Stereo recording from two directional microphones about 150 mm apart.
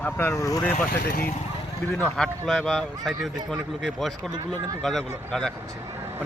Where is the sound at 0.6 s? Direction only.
10° left (ahead or behind).